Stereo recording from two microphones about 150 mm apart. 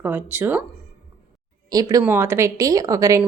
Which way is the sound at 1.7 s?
25° right (ahead or behind).